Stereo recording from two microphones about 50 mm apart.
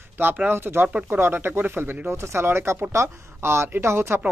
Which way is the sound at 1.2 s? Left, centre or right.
Right.